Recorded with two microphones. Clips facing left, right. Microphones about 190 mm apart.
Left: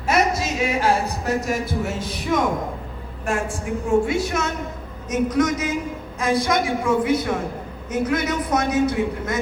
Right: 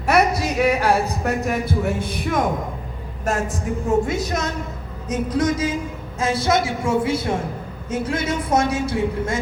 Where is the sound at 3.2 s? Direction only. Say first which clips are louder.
Right 1 dB; 40° right (ahead or behind).